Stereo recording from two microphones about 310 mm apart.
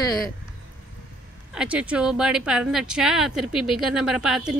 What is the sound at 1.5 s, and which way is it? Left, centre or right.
Speech, centre.